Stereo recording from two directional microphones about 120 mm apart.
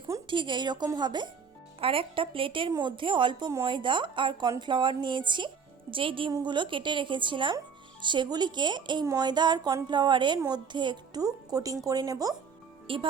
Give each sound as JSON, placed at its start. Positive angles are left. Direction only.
{"t": 0.3, "sound": "a woman's voice", "side_deg": -40}
{"t": 1.8, "sound": "a woman's voice", "side_deg": -50}
{"t": 12.9, "sound": "a woman's voice", "side_deg": -50}